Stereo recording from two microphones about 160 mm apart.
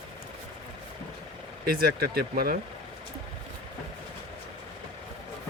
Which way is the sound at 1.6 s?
80° right.